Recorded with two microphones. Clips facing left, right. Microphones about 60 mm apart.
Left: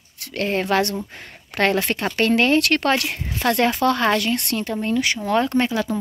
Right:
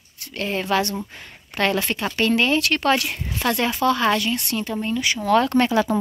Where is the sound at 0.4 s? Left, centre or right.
Left.